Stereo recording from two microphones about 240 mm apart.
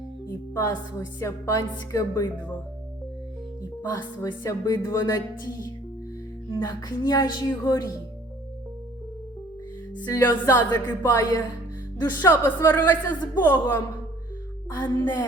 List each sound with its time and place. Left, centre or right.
0.5 s a woman's voice: centre
3.9 s a woman's voice: centre
10.0 s a woman's voice: centre
14.8 s a woman's voice: centre